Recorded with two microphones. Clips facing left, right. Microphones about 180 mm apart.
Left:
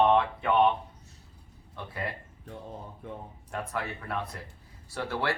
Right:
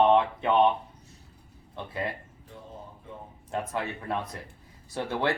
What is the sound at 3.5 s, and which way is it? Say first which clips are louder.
Speech: right 3 dB; 20° right (ahead or behind).